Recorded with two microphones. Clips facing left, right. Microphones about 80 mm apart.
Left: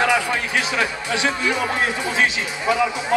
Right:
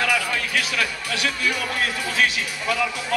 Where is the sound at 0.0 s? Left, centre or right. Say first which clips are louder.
Left 4 dB; left.